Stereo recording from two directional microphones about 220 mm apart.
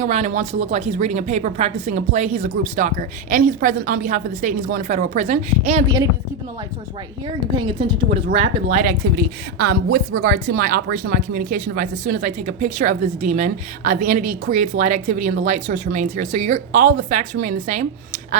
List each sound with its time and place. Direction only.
0.0 s speech: 35° right (ahead or behind)
7.5 s speech: 20° right (ahead or behind)
8.8 s speech: 45° right (ahead or behind)